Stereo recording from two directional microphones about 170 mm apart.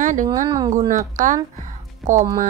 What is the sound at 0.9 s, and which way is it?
Speech, 50° right (ahead or behind).